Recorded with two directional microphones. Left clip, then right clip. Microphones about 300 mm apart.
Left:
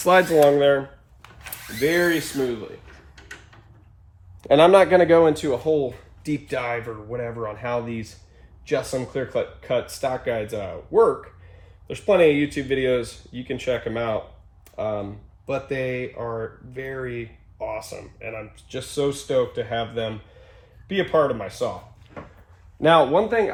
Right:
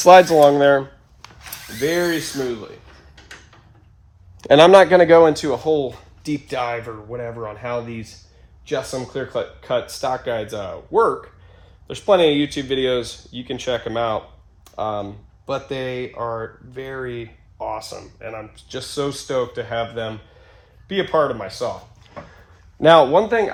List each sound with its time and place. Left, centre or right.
0.0 s speech: centre
1.8 s speech: centre
4.4 s speech: right; by 14.2 s centre
14.6 s computer keyboard: centre
15.4 s speech: centre
22.8 s speech: right